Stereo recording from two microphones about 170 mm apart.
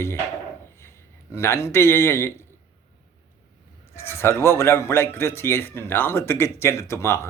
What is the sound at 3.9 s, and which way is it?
Speech, 15° left (ahead or behind).